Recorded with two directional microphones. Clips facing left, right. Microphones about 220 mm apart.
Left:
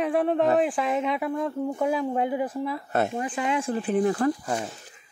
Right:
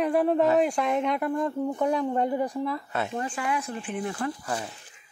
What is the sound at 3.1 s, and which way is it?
Speech, 15° left (ahead or behind).